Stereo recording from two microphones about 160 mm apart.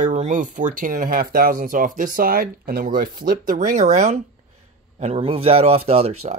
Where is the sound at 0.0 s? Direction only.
50° right (ahead or behind).